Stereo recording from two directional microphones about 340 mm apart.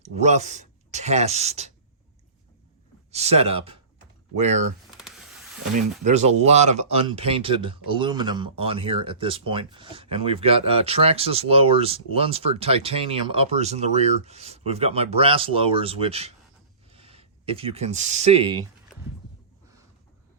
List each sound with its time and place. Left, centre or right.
0.0 s speech: centre
3.1 s speech: centre
5.7 s speech: centre